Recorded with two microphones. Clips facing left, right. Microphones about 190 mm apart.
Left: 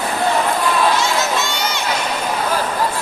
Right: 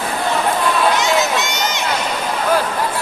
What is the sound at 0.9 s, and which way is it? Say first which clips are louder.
Run: right 2 dB; 20° right (ahead or behind).